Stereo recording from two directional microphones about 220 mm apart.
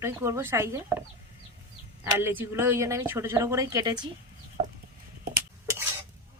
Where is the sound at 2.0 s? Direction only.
10° right (ahead or behind).